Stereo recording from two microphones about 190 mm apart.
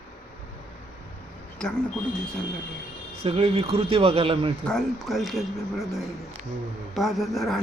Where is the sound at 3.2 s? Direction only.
30° right (ahead or behind).